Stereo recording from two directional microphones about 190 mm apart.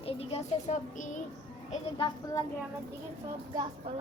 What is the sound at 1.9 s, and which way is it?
Speech, 20° left (ahead or behind).